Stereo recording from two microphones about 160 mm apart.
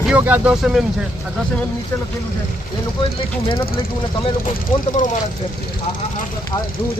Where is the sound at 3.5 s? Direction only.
35° left (ahead or behind).